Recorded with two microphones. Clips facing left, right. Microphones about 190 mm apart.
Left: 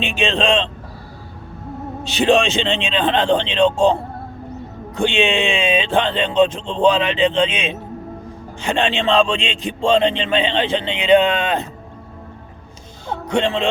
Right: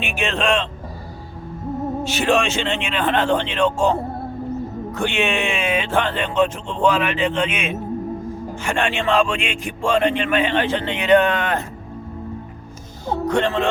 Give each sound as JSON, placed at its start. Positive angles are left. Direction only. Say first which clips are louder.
{"t": 0.0, "sound": "a man's voice", "louder": "left 3 dB", "side_deg": 20}
{"t": 2.1, "sound": "a man's voice", "louder": "left 5 dB", "side_deg": 20}
{"t": 4.9, "sound": "a man's voice", "louder": "left 4 dB", "side_deg": 20}
{"t": 13.3, "sound": "a man's voice", "louder": "left 2 dB", "side_deg": 20}